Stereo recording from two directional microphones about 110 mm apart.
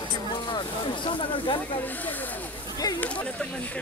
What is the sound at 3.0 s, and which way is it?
Speech, 10° left (ahead or behind).